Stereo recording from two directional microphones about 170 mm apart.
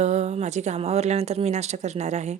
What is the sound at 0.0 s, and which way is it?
A woman's voice, 40° right (ahead or behind).